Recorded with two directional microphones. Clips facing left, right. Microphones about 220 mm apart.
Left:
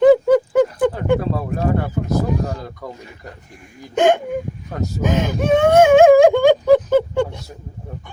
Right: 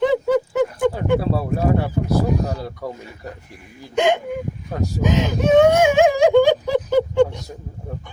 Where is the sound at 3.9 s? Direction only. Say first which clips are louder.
Left 3 dB; 50° left (ahead or behind).